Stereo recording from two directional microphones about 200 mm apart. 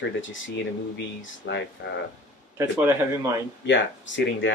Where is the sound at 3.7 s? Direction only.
65° left (ahead or behind).